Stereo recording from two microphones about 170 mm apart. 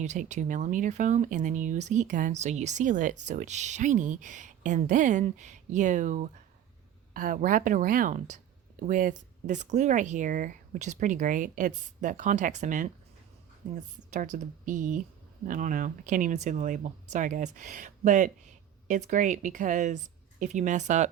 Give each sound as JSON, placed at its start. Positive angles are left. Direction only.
{"t": 0.0, "sound": "speech", "side_deg": -45}